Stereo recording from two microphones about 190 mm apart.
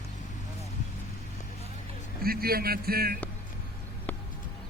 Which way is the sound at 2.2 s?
50° right (ahead or behind).